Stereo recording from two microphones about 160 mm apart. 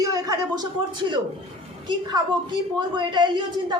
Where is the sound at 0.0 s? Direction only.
20° right (ahead or behind).